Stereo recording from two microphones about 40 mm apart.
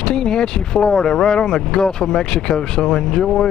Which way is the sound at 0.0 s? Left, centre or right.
Centre.